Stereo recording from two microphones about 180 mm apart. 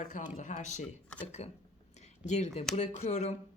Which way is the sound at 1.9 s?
40° left (ahead or behind).